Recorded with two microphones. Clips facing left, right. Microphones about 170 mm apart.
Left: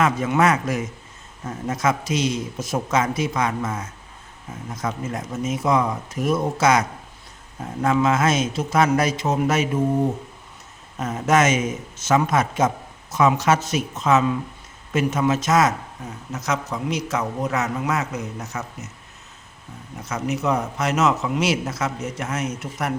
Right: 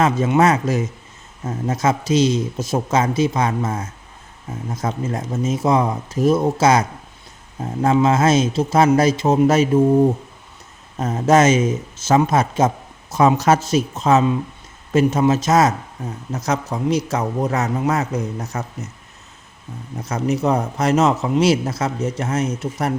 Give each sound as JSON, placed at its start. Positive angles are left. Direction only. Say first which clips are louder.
{"t": 0.0, "sound": "speech", "louder": "right 3 dB", "side_deg": -30}
{"t": 10.9, "sound": "a man's voice", "louder": "right 4 dB", "side_deg": -30}
{"t": 20.1, "sound": "a man's voice", "louder": "right 4 dB", "side_deg": -35}